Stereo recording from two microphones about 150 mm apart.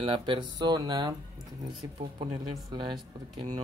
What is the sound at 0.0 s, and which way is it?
Speech, 35° right (ahead or behind).